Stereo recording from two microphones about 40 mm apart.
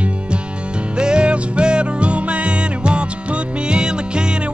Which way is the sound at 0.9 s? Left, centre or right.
Right.